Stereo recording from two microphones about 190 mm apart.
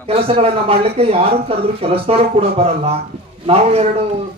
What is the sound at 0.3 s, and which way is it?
A man's voice, 30° right (ahead or behind).